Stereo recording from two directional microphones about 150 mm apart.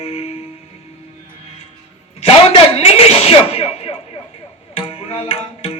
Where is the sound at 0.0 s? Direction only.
40° left (ahead or behind).